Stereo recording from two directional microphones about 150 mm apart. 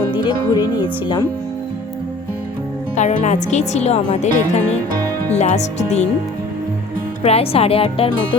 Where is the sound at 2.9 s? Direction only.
55° left (ahead or behind).